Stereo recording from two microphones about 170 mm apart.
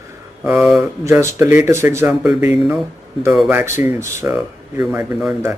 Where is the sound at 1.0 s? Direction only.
15° right (ahead or behind).